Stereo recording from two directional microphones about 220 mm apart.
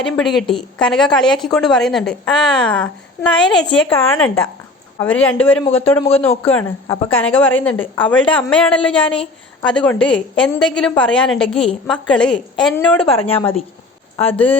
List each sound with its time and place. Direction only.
0.0 s a woman's voice: centre (ahead or behind)
13.1 s speech: 25° left (ahead or behind)
14.3 s speech: 5° left (ahead or behind)